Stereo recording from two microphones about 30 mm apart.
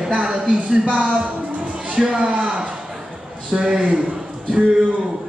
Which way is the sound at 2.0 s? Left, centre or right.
Right.